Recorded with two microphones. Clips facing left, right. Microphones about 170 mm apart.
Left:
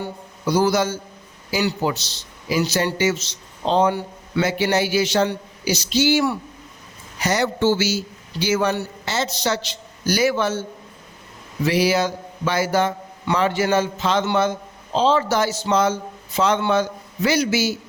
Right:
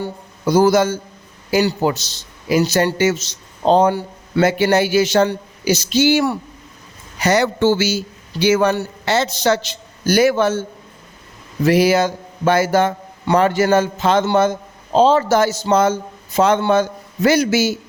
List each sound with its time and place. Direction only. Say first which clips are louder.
0.0 s a man's voice: right 4 dB; 45° right (ahead or behind)
7.2 s a man's voice: right 5 dB; 65° right (ahead or behind); by 10.6 s 50° right (ahead or behind)
11.6 s a man's voice: right 5 dB; 50° right (ahead or behind)